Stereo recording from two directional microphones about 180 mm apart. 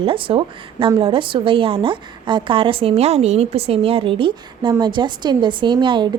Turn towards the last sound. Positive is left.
turn(degrees=-25)  # may be behind; listen again after turning